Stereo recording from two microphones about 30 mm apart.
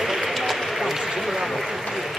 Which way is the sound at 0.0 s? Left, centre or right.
Centre.